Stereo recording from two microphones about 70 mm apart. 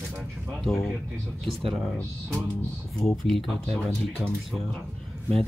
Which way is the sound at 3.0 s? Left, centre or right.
Centre.